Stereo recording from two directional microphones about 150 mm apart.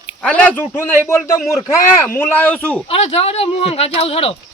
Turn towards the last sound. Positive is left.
turn(degrees=40)  # may be behind; listen again after turning